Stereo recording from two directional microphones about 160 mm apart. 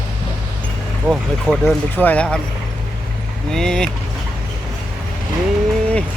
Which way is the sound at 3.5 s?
5° left (ahead or behind).